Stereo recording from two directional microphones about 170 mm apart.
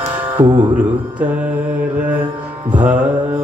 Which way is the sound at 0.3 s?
30° right (ahead or behind).